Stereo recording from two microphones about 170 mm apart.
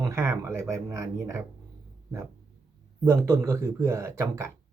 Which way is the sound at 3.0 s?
15° right (ahead or behind).